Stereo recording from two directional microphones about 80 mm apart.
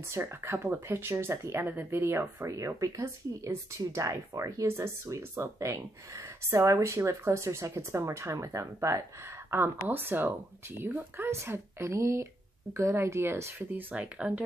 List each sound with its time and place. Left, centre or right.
0.1 s speech: right
9.5 s speech: right
11.2 s speech: right